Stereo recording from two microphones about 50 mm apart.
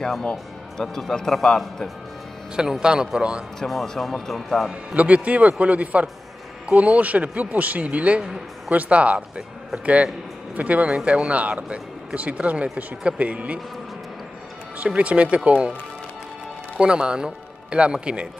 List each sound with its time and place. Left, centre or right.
0.0 s a man's voice: centre
2.5 s a man's voice: centre
3.5 s speech: centre
4.6 s speech: right
10.5 s speech: right
15.0 s speech: right
16.7 s speech: centre